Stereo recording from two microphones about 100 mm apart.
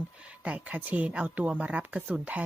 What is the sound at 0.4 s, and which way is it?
Speech, 15° right (ahead or behind).